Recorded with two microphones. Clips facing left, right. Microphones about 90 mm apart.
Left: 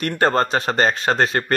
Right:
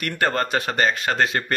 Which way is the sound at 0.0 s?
30° left (ahead or behind).